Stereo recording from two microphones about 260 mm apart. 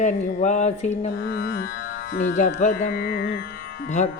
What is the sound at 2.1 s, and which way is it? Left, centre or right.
Music, left.